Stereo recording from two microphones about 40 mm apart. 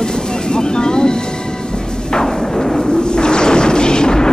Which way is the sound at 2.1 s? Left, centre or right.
Centre.